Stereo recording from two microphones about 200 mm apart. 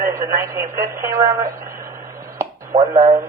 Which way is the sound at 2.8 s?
15° right (ahead or behind).